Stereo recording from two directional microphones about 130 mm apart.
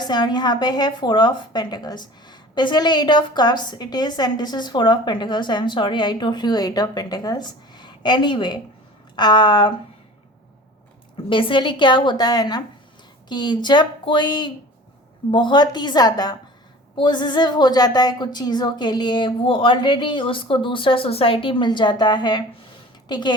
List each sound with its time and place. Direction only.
0.0 s a woman's voice: 35° left (ahead or behind)
11.3 s a woman's voice: 40° left (ahead or behind)